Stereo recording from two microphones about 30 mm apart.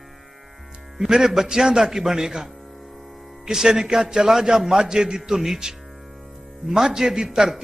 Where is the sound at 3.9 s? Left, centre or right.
Right.